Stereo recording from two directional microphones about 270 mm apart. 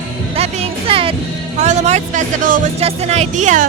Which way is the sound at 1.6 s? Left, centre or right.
Right.